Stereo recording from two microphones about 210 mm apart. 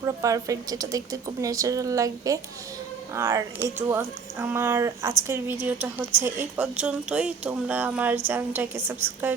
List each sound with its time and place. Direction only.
0.0 s speech: 15° right (ahead or behind)